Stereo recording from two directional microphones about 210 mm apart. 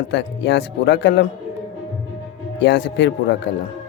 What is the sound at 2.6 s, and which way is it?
Speech, 55° left (ahead or behind).